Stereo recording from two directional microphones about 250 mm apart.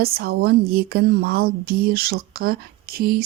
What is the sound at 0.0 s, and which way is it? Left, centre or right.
Speech, right.